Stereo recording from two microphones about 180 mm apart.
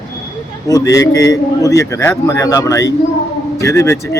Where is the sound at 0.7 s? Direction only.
20° left (ahead or behind).